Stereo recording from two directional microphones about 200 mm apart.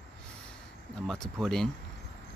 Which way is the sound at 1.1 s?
Centre (ahead or behind).